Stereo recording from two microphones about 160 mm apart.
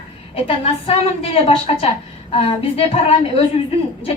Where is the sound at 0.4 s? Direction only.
35° left (ahead or behind).